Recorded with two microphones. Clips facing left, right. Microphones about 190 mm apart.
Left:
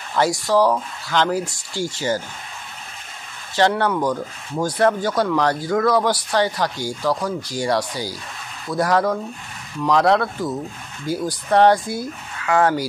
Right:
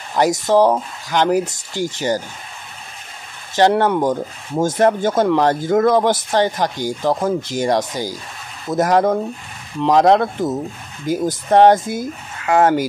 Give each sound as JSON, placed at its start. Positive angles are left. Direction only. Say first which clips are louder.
{"t": 0.1, "sound": "speech", "louder": "right 3 dB", "side_deg": -20}
{"t": 3.5, "sound": "speech", "louder": "right 4 dB", "side_deg": -20}